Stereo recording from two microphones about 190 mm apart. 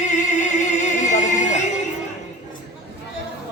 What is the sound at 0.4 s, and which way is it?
Music, 40° left (ahead or behind).